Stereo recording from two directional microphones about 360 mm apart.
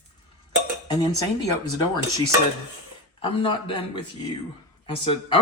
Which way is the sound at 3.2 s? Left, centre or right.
Centre.